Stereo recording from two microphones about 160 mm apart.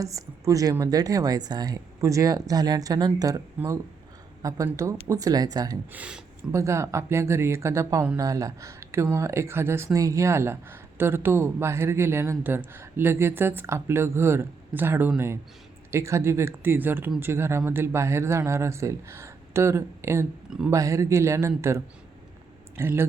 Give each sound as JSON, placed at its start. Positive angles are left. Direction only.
{"t": 0.0, "sound": "a woman's voice", "side_deg": -20}
{"t": 5.9, "sound": "speech", "side_deg": -5}
{"t": 6.5, "sound": "speech", "side_deg": -20}
{"t": 22.8, "sound": "speech", "side_deg": -15}